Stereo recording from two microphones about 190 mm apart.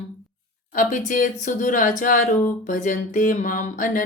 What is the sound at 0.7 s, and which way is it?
A woman's voice, 45° left (ahead or behind).